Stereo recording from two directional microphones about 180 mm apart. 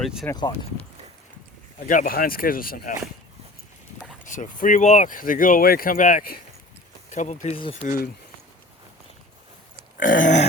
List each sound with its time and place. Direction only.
0.0 s speech: centre (ahead or behind)
1.9 s speech: 50° left (ahead or behind)
4.3 s speech: 45° left (ahead or behind)
7.9 s speech: 50° left (ahead or behind)
10.0 s speech: 50° left (ahead or behind)